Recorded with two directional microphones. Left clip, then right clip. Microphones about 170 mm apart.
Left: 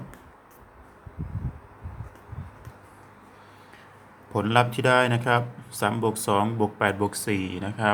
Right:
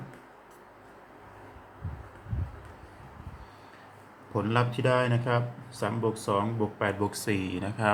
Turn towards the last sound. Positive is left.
turn(degrees=15)  # may be behind; listen again after turning